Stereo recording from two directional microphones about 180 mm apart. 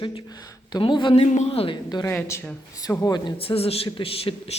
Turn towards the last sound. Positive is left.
turn(degrees=35)  # may be behind; listen again after turning